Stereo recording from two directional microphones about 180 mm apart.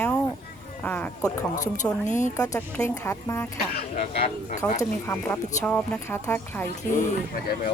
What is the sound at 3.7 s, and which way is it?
Speech, 55° left (ahead or behind).